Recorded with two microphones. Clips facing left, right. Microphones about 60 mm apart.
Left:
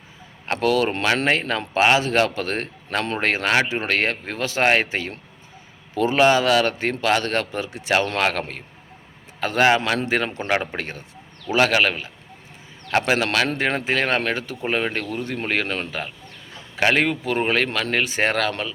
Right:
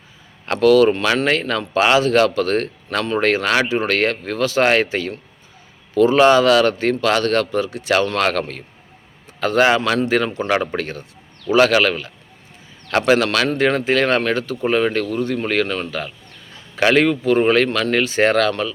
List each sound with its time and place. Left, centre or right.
0.4 s speech: centre
16.7 s speech: centre